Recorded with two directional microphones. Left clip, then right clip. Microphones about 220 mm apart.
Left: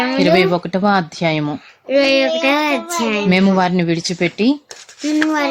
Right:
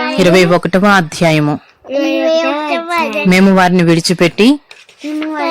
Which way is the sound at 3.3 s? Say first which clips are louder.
Right 7 dB; 20° right (ahead or behind).